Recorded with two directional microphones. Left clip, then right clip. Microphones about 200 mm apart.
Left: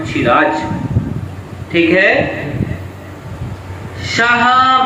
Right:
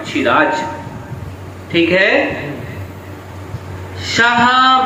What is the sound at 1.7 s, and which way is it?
Speech, 45° right (ahead or behind).